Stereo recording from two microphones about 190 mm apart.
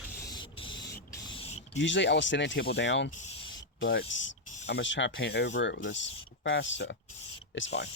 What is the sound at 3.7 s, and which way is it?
Speech, 80° left.